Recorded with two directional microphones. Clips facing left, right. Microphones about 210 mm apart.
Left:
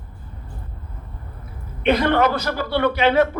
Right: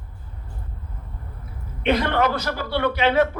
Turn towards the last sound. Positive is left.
turn(degrees=50)  # may be behind; listen again after turning